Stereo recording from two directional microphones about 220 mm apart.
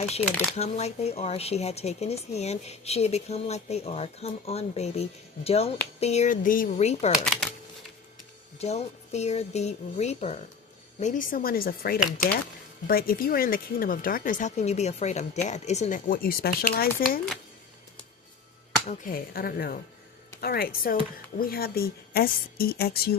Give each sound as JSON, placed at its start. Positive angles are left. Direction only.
{"t": 0.5, "sound": "speech", "side_deg": 30}
{"t": 7.3, "sound": "shuffling cards", "side_deg": 5}
{"t": 8.5, "sound": "speech", "side_deg": 30}
{"t": 18.9, "sound": "a woman's voice", "side_deg": 40}